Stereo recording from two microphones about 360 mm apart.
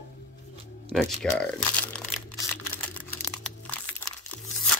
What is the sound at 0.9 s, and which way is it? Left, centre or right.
Crumpling, centre.